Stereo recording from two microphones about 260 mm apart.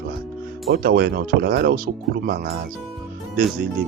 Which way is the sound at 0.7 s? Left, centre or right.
Right.